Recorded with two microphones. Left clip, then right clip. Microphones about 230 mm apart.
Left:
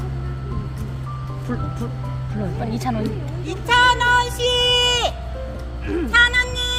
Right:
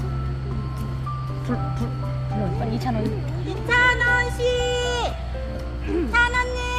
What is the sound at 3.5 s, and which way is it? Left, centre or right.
Music, left.